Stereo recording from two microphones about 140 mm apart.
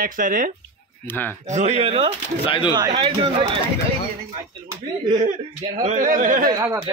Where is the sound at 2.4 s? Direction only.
40° left (ahead or behind).